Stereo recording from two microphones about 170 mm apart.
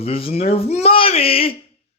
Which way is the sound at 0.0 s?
35° left (ahead or behind).